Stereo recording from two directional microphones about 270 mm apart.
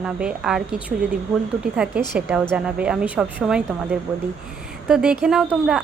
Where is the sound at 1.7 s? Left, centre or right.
Centre.